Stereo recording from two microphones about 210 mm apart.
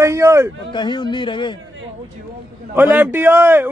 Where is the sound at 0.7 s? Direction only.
20° left (ahead or behind).